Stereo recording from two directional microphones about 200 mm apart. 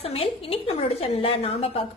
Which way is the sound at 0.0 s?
30° left (ahead or behind).